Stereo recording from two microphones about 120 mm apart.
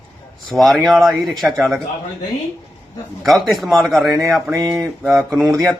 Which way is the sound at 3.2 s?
Centre (ahead or behind).